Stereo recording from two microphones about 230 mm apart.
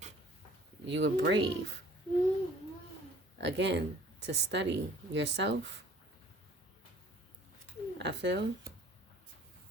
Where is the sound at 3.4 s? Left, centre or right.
Right.